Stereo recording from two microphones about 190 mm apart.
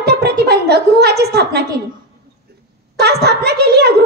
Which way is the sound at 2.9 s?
60° right (ahead or behind).